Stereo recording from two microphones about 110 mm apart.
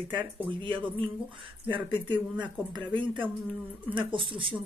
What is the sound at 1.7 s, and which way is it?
Speech, 45° right (ahead or behind).